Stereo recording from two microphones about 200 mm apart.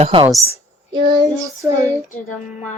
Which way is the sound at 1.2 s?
15° right (ahead or behind).